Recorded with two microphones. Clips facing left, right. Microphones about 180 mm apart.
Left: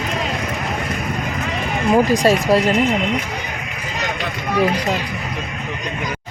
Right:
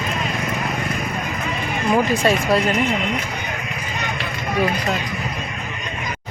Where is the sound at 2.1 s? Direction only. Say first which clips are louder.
Left 3 dB; 35° left (ahead or behind).